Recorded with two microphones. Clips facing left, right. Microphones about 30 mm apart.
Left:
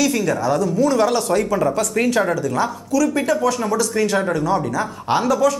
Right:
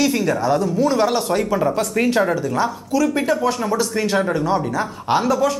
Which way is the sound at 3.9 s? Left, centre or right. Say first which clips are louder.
Even; centre.